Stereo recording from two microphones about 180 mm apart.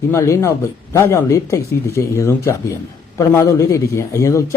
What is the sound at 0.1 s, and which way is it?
Speech, 15° left (ahead or behind).